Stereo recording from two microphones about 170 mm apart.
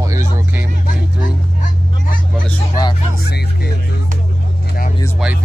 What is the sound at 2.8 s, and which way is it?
Music, 20° left (ahead or behind).